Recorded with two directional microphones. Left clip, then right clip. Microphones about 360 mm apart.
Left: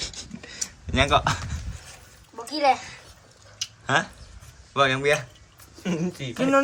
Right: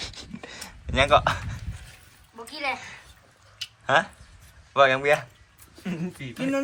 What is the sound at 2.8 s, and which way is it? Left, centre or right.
A child's voice, centre.